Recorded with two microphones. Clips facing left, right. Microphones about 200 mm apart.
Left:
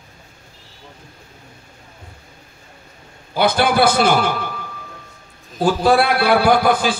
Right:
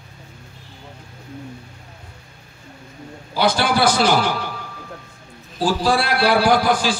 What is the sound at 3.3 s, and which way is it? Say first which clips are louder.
A man's voice: left 2 dB; 55° left (ahead or behind).